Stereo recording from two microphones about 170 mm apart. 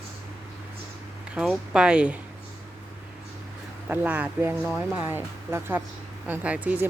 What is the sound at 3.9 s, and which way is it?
Speech, 10° right (ahead or behind).